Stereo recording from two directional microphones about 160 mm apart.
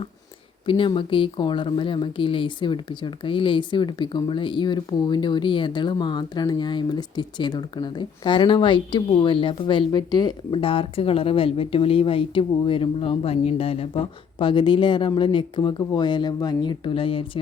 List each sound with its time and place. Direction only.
0.7 s speech: 30° left (ahead or behind)